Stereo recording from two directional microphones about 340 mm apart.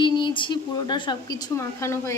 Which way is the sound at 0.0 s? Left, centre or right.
Centre.